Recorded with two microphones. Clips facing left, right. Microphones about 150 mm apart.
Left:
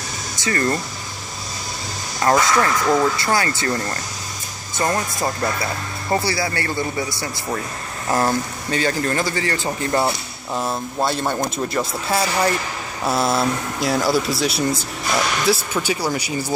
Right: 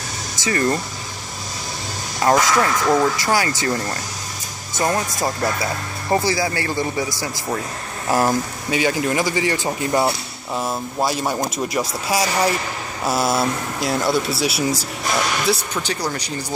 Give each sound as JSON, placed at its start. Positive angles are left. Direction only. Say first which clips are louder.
{"t": 0.5, "sound": "speech", "louder": "right 1 dB", "side_deg": -10}
{"t": 2.2, "sound": "speech", "louder": "even", "side_deg": -5}
{"t": 8.1, "sound": "speech", "louder": "right 1 dB", "side_deg": -10}
{"t": 10.5, "sound": "speech", "louder": "even", "side_deg": 0}